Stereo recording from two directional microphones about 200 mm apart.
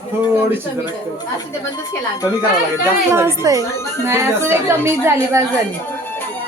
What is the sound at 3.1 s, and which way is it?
A woman's voice, 15° right (ahead or behind).